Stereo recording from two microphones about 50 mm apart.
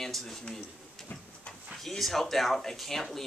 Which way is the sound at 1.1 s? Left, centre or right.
Left.